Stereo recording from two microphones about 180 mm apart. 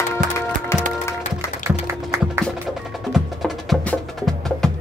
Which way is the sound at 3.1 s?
Centre (ahead or behind).